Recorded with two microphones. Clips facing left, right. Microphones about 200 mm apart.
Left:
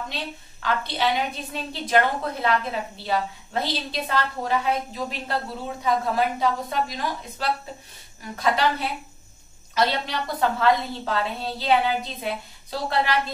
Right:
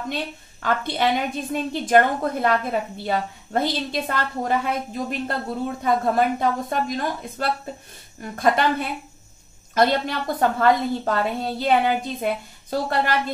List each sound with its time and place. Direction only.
0.1 s a woman's voice: 50° right (ahead or behind)